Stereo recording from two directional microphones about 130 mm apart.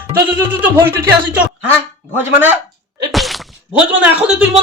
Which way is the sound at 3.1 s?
Centre (ahead or behind).